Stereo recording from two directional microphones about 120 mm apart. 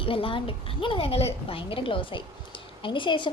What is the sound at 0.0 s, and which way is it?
A woman's voice, 50° left (ahead or behind).